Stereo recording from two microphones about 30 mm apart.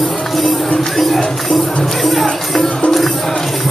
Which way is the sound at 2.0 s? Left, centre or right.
Centre.